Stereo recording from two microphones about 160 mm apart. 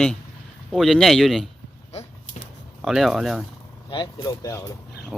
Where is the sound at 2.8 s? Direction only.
Centre (ahead or behind).